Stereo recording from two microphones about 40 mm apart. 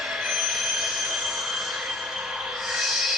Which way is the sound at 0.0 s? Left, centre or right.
Centre.